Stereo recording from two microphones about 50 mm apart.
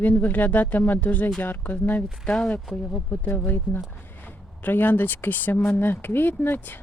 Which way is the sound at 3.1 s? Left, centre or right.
Left.